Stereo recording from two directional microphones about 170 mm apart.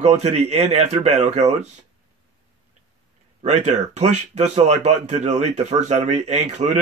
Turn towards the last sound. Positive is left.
turn(degrees=-45)  # may be behind; listen again after turning